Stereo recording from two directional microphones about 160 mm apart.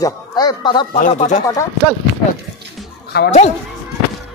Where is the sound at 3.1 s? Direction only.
80° left.